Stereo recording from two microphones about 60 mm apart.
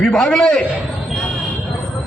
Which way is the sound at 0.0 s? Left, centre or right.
Centre.